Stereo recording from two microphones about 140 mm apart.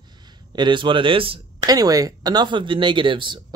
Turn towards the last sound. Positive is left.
turn(degrees=-35)  # may be behind; listen again after turning